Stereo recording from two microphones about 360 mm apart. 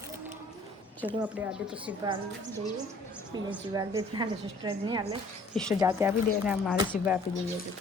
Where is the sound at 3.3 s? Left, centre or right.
Centre.